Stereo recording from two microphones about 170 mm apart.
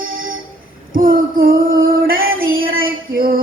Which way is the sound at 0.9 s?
55° right (ahead or behind).